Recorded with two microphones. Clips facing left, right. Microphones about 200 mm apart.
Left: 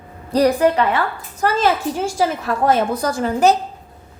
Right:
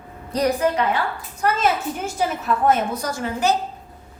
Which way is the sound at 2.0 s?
90° left.